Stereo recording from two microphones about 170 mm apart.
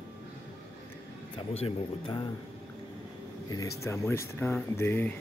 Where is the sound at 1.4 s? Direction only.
30° left (ahead or behind).